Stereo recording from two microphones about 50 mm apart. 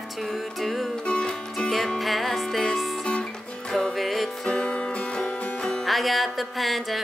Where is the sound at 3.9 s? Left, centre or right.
Centre.